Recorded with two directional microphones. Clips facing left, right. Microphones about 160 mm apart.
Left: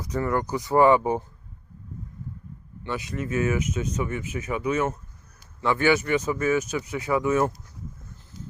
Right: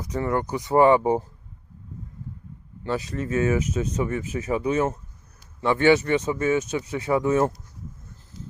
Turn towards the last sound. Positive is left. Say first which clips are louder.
# right 2 dB
turn(degrees=-30)  # may be behind; listen again after turning